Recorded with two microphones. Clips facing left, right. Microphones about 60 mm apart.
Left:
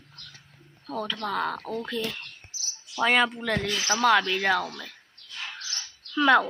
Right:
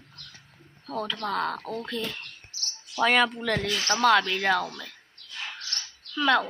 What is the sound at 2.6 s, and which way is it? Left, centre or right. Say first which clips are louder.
Cricket: right 3 dB; right.